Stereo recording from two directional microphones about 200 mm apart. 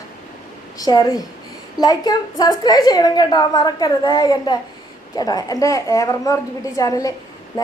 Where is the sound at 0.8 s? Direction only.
20° left (ahead or behind).